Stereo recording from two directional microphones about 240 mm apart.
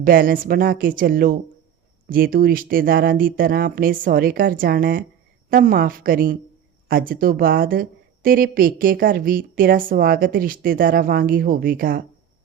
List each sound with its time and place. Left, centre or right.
0.0 s speech: right